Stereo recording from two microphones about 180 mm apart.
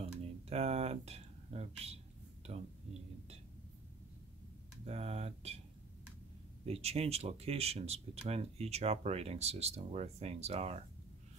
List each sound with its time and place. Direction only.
0.0 s a sound: 35° right (ahead or behind)
4.8 s speech: 35° right (ahead or behind)
6.6 s speech: 35° right (ahead or behind)